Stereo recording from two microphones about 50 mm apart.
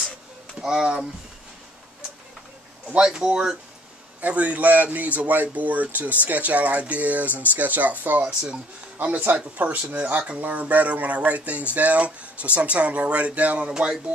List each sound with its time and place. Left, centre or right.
0.6 s speech: centre
3.0 s speech: centre
4.2 s speech: right